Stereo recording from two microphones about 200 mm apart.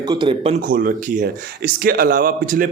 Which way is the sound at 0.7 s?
45° right (ahead or behind).